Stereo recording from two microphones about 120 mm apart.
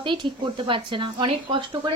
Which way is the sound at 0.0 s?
40° right (ahead or behind).